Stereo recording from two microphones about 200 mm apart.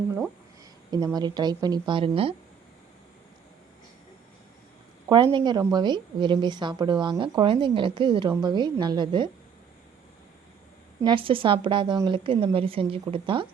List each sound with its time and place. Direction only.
0.9 s a woman's voice: 20° right (ahead or behind)
5.0 s a woman's voice: 25° right (ahead or behind)
11.0 s a woman's voice: 25° right (ahead or behind)